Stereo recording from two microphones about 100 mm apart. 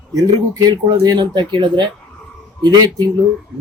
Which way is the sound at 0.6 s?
45° right (ahead or behind).